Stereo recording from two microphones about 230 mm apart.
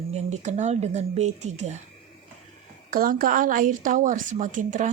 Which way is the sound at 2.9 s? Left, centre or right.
Right.